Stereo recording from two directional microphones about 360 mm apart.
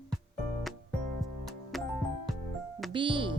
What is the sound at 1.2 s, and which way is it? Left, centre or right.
Music, centre.